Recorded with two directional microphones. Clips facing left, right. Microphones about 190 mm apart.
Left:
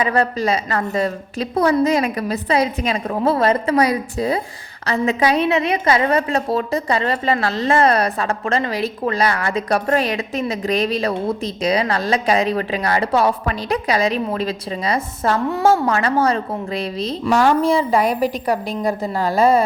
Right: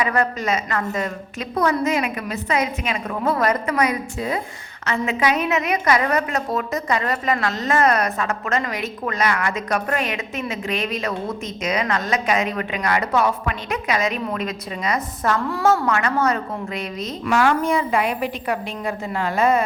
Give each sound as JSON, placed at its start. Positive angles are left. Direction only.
{"t": 0.0, "sound": "a woman's voice", "side_deg": 30}